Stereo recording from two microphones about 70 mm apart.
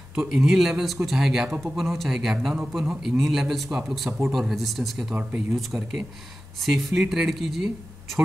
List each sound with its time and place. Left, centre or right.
0.3 s speech: centre